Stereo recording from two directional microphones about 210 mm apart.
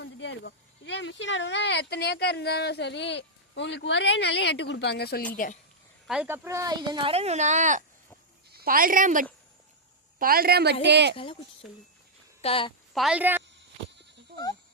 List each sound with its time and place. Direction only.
0.0 s speech: 60° left (ahead or behind); by 5.5 s 40° left (ahead or behind)
6.1 s a woman's voice: 10° right (ahead or behind); by 11.1 s 55° right (ahead or behind)
12.4 s a woman's voice: 25° left (ahead or behind)
12.9 s a woman's voice: centre (ahead or behind)